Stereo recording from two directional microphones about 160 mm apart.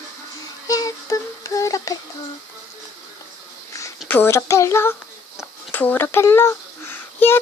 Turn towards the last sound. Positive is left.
turn(degrees=15)  # may be behind; listen again after turning